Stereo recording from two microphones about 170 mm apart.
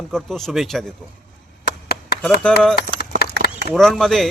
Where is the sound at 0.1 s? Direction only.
Centre (ahead or behind).